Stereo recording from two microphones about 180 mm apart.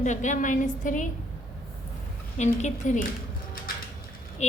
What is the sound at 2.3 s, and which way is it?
Speech, 40° left (ahead or behind).